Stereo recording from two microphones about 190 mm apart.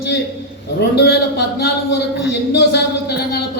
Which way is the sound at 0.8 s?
60° left (ahead or behind).